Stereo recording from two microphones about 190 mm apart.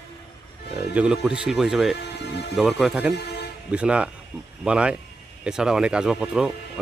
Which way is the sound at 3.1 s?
60° left (ahead or behind).